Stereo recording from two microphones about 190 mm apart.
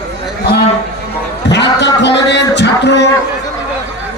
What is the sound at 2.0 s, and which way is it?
A man's voice, 65° left (ahead or behind).